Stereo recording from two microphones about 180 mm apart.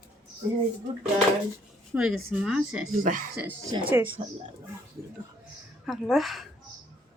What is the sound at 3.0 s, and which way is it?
Speech, 50° right (ahead or behind).